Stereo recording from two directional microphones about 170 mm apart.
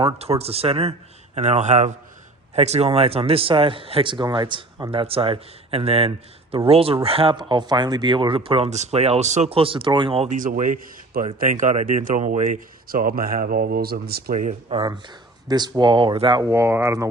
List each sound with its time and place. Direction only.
0.0 s a man's voice: 35° right (ahead or behind)
10.2 s speech: 50° right (ahead or behind)
14.7 s speech: 30° right (ahead or behind)
16.5 s speech: 15° right (ahead or behind)